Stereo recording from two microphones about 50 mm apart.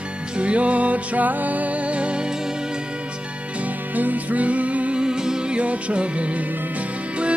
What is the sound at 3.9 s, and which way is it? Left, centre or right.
Music, right.